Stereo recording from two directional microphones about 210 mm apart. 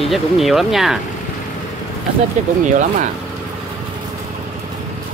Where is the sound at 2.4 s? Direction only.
35° right (ahead or behind).